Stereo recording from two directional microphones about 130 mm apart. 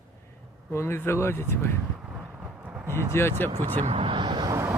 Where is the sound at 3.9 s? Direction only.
45° right (ahead or behind); by 4.7 s 25° right (ahead or behind).